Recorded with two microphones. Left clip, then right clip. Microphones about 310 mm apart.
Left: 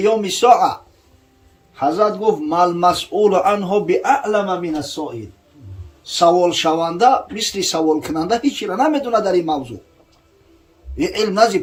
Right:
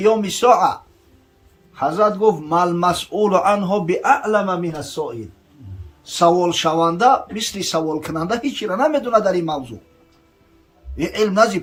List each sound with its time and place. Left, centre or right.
0.0 s a man's voice: centre
1.7 s a man's voice: centre
10.9 s a man's voice: centre